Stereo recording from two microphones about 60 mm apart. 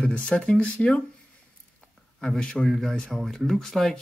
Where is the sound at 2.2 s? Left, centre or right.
Centre.